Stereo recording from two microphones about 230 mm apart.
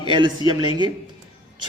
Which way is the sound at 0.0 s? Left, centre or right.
Right.